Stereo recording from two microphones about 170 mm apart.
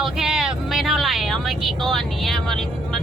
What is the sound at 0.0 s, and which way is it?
Speech, 5° right (ahead or behind).